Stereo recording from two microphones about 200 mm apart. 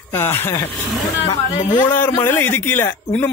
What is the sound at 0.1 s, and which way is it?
A man's voice, 10° left (ahead or behind).